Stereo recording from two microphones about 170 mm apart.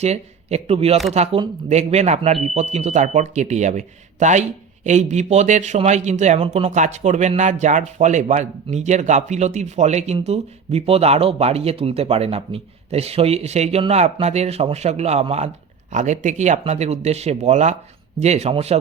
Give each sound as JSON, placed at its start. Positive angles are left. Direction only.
{"t": 0.0, "sound": "speech", "side_deg": -40}